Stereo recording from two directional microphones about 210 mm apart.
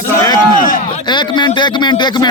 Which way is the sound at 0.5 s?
40° left (ahead or behind).